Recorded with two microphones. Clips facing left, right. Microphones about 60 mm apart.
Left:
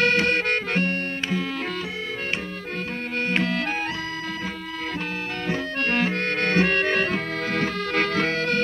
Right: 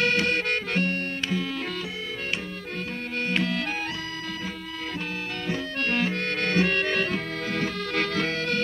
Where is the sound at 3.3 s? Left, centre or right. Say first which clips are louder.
Left 2 dB; left.